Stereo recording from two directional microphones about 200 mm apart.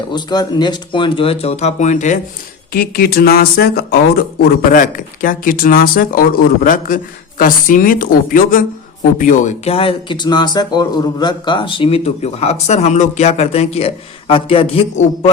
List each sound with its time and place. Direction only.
0.1 s speech: 20° left (ahead or behind); by 2.1 s 40° left (ahead or behind)
2.7 s speech: 50° left (ahead or behind); by 15.3 s 30° left (ahead or behind)